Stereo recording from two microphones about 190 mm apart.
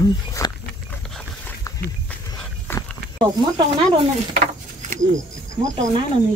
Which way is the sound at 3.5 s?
25° right (ahead or behind).